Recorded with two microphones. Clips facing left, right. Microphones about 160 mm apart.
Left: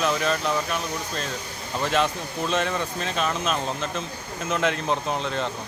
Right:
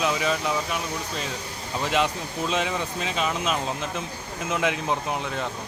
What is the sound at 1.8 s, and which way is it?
Speech, 15° right (ahead or behind).